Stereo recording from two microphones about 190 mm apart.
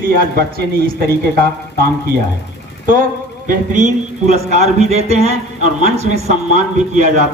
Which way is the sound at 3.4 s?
45° right (ahead or behind).